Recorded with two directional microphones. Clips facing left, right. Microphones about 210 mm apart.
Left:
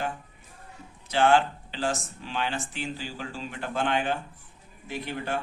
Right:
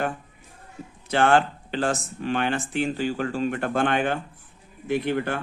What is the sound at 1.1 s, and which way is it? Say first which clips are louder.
Speech: right 2 dB; 55° right (ahead or behind).